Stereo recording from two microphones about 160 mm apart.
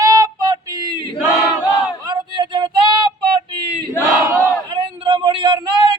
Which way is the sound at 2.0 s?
25° right (ahead or behind).